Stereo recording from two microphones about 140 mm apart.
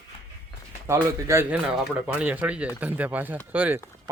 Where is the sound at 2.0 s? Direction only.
10° right (ahead or behind).